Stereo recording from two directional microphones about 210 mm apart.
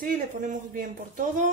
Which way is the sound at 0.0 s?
40° right (ahead or behind).